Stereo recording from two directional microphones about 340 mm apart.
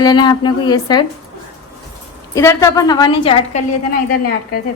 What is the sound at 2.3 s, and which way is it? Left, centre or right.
A woman's voice, centre.